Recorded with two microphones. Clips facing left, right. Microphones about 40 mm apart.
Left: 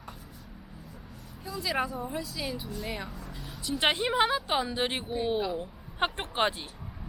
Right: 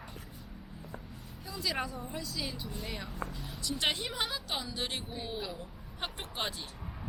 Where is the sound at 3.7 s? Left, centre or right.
Left.